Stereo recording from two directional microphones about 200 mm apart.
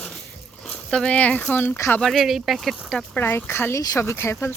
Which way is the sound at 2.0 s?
Centre (ahead or behind).